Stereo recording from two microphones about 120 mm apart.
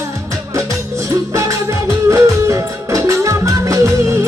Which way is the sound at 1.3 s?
25° right (ahead or behind).